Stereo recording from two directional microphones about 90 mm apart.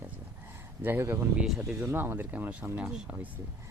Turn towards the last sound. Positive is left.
turn(degrees=-20)  # may be behind; listen again after turning